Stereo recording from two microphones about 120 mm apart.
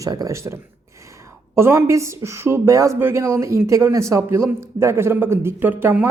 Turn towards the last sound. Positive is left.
turn(degrees=-15)  # may be behind; listen again after turning